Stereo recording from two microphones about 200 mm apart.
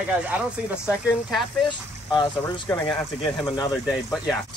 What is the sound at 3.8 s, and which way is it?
Speech, centre (ahead or behind).